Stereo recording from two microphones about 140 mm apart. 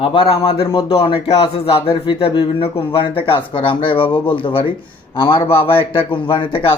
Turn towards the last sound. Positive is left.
turn(degrees=35)  # may be behind; listen again after turning